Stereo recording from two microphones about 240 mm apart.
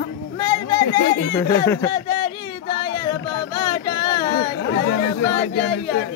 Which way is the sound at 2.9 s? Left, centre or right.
Centre.